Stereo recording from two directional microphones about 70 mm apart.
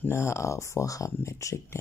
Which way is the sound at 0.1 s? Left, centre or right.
Left.